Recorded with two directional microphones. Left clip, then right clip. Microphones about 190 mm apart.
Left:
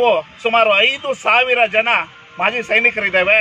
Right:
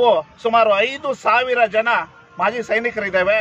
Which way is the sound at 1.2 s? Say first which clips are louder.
Left 2 dB; 15° right (ahead or behind).